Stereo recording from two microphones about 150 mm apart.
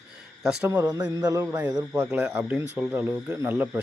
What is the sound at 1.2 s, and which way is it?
Speech, 20° right (ahead or behind).